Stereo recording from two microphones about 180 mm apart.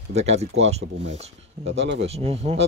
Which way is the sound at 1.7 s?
80° right.